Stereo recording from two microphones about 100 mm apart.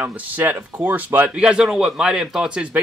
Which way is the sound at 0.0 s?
15° right (ahead or behind).